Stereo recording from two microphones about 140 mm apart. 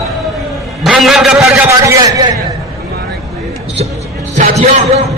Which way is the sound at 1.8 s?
20° right (ahead or behind).